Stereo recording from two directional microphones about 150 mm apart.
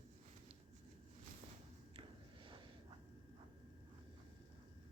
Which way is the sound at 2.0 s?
35° right (ahead or behind).